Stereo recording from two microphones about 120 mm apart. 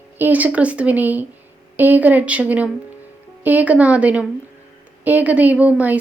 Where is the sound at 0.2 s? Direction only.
15° right (ahead or behind).